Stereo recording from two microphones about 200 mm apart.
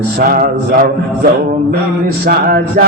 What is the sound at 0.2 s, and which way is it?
Mantra, 45° right (ahead or behind).